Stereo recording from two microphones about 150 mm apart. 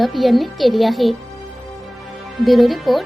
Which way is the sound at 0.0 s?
Centre (ahead or behind).